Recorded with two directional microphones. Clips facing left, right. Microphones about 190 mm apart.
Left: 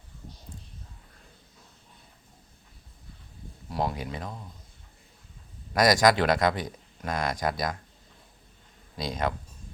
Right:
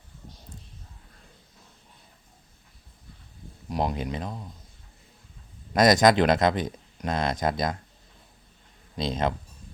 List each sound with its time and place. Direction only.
3.7 s speech: 20° right (ahead or behind)
5.7 s speech: 20° right (ahead or behind)
9.0 s speech: 25° right (ahead or behind)